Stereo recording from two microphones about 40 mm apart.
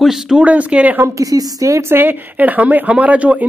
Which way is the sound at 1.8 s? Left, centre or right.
Right.